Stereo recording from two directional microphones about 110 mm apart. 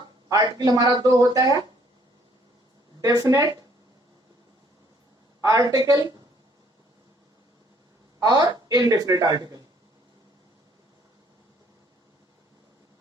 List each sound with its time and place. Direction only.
0.3 s speech: 35° right (ahead or behind)
3.0 s speech: 30° right (ahead or behind)
5.4 s speech: 30° right (ahead or behind)
8.2 s speech: 35° right (ahead or behind)